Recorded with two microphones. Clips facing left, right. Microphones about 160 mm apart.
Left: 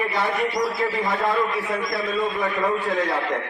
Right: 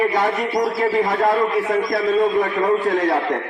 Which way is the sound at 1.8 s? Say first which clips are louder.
Right 9 dB; 40° right (ahead or behind).